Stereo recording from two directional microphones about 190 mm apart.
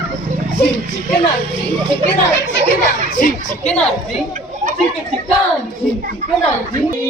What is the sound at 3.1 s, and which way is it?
Speech, 45° left (ahead or behind).